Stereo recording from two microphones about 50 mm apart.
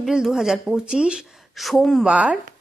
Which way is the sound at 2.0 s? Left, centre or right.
Right.